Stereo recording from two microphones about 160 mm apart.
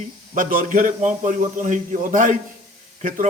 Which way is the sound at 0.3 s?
60° right (ahead or behind).